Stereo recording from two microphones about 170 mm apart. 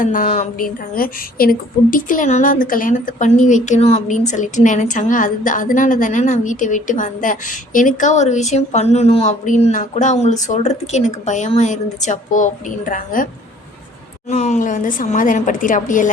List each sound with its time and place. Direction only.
0.0 s speech: 50° left (ahead or behind)
14.3 s speech: 45° left (ahead or behind)